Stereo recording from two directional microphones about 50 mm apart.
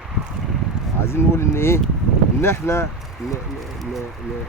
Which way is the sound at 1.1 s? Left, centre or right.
Left.